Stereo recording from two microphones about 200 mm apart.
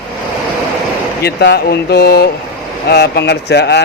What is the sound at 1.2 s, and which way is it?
A man's voice, 50° left (ahead or behind).